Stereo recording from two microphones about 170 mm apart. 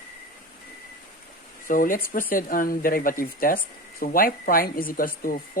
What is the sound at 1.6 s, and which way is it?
Speech, 55° left (ahead or behind).